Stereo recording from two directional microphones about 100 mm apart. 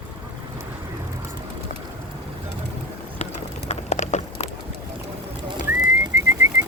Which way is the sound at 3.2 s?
90° left.